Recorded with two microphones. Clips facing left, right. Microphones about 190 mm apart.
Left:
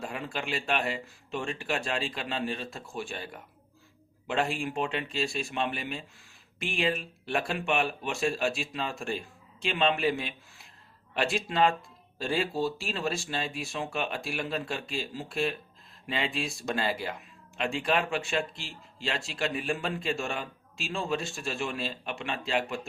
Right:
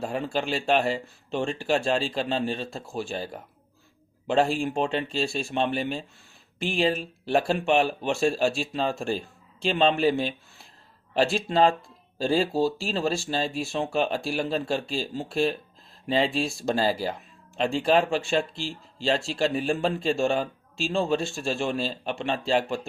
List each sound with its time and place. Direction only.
0.0 s speech: 35° right (ahead or behind)